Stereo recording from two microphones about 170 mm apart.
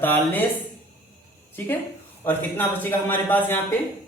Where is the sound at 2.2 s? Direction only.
10° left (ahead or behind).